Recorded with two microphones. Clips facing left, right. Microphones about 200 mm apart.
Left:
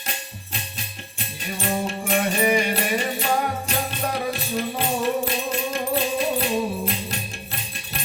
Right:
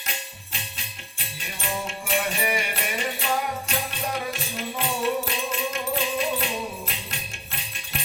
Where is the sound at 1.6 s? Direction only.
40° left (ahead or behind).